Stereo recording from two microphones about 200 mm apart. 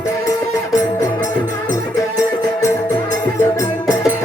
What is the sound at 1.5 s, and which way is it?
Music, 15° left (ahead or behind).